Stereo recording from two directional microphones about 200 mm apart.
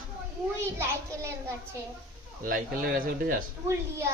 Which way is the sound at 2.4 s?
45° right (ahead or behind).